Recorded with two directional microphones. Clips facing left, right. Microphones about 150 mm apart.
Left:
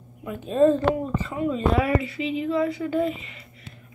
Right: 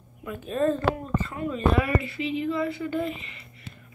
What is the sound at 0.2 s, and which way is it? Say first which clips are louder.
Speech: left 6 dB; 20° left (ahead or behind).